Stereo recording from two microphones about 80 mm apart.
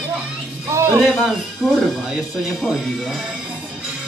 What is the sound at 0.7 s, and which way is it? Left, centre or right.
Speech, right.